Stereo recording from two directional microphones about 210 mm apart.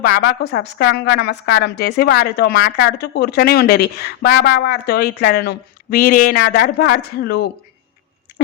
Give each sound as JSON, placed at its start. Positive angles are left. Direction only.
{"t": 0.0, "sound": "a woman's voice", "side_deg": 50}